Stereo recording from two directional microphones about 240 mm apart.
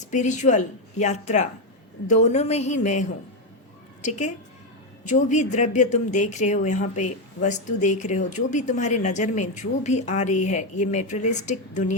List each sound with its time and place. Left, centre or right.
0.1 s speech: left